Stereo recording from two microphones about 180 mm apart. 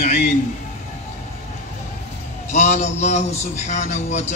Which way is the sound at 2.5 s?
40° left (ahead or behind).